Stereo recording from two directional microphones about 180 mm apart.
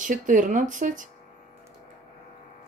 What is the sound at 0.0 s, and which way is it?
A woman's voice, 45° right (ahead or behind).